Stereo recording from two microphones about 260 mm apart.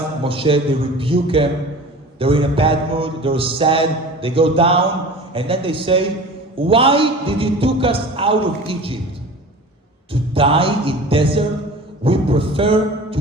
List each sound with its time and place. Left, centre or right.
0.3 s mantra: right
10.1 s mantra: right